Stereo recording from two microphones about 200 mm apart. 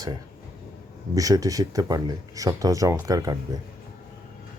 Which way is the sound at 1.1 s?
15° right (ahead or behind).